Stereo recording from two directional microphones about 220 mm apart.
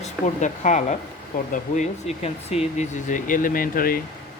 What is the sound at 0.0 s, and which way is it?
A woman's voice, 35° left (ahead or behind).